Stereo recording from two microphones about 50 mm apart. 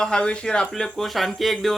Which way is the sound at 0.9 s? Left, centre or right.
Centre.